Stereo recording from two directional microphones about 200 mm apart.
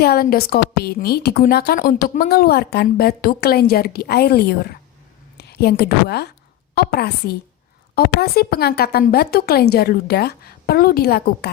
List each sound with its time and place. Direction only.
0.0 s a woman's voice: 50° left (ahead or behind)